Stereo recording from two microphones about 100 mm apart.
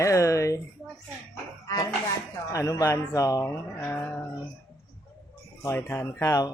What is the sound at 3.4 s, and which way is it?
Speech, 25° left (ahead or behind).